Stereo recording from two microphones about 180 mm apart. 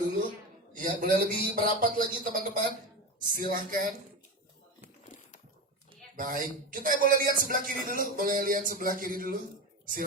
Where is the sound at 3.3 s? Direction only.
55° right (ahead or behind).